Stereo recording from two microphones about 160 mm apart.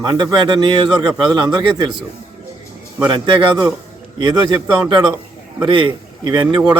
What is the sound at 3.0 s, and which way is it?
Speech, 30° right (ahead or behind).